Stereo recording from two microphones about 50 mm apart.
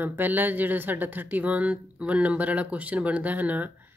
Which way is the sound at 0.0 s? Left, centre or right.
Right.